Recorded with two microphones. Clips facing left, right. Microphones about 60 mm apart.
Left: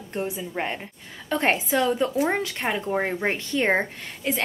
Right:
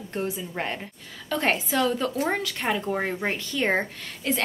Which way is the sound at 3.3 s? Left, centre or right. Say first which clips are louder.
Left 3 dB; left.